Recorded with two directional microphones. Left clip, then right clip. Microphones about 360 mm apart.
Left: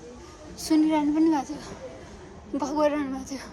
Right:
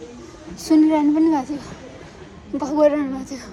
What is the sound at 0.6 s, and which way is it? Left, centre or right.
Speech, centre.